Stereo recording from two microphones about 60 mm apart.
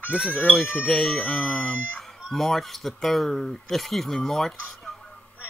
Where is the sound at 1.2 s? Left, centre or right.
Centre.